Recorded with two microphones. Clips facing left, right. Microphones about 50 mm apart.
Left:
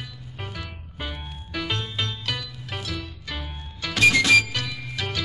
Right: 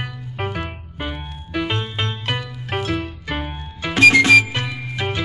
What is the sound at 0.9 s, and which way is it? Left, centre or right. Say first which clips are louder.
Music: right 4 dB; right.